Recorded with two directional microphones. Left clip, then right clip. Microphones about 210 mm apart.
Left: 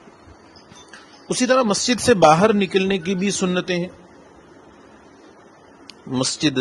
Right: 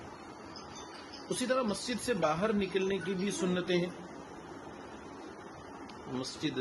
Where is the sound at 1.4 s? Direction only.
50° left (ahead or behind).